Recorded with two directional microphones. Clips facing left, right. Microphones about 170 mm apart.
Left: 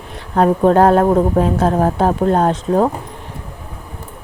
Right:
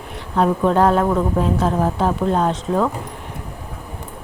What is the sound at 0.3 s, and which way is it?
Speech, 50° left (ahead or behind).